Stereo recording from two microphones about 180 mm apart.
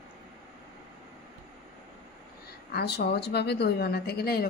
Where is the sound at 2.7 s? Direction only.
65° left (ahead or behind).